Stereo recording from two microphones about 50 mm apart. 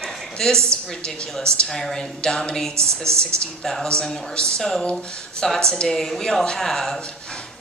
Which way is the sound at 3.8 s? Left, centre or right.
Centre.